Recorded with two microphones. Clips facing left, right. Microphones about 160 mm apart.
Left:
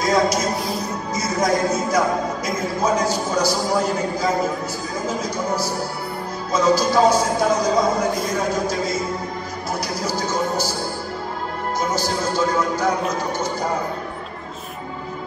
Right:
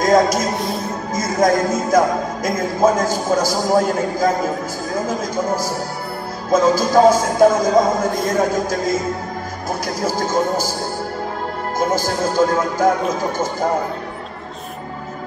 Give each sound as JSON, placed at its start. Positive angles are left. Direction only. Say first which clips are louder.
{"t": 0.0, "sound": "a man's voice", "louder": "right 4 dB", "side_deg": -50}
{"t": 0.6, "sound": "music", "louder": "right 2 dB", "side_deg": 0}
{"t": 1.1, "sound": "speech", "louder": "right 4 dB", "side_deg": -50}
{"t": 10.0, "sound": "speech", "louder": "right 5 dB", "side_deg": -50}
{"t": 11.8, "sound": "speech", "louder": "right 5 dB", "side_deg": -50}